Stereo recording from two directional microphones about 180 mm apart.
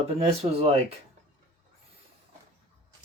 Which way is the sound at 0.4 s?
30° right (ahead or behind).